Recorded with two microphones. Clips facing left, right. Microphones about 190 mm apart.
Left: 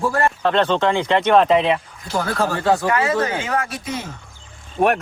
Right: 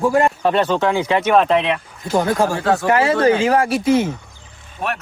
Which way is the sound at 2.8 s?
30° right (ahead or behind).